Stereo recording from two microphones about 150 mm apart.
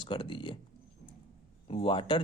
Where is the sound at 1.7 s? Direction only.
35° left (ahead or behind).